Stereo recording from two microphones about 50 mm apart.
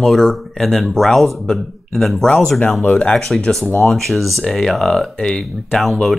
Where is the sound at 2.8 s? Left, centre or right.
Left.